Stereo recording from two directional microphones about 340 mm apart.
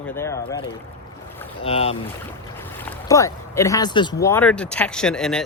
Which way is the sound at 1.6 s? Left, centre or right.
Centre.